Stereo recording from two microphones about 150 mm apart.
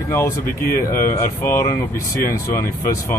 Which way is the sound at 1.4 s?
20° left (ahead or behind).